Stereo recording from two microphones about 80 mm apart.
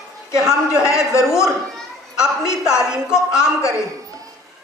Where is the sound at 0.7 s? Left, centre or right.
Left.